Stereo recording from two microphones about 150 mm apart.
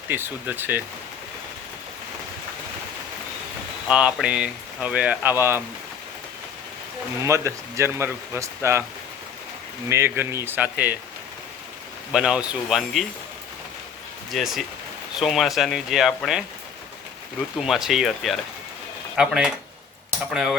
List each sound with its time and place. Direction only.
0.1 s speech: 15° right (ahead or behind)
3.8 s speech: 5° right (ahead or behind)
7.3 s speech: 20° right (ahead or behind)
9.9 s speech: 15° right (ahead or behind)
12.1 s speech: 5° right (ahead or behind)
14.3 s speech: centre (ahead or behind)
17.6 s speech: 5° right (ahead or behind)